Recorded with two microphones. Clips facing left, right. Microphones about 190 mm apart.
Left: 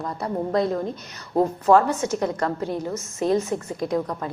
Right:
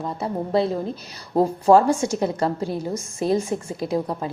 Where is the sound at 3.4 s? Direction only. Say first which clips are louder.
Even; 30° right (ahead or behind).